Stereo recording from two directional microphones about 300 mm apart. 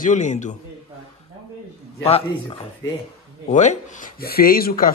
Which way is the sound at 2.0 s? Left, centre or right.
Centre.